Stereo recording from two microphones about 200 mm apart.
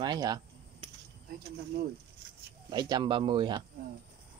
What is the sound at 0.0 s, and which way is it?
Speech, 20° right (ahead or behind).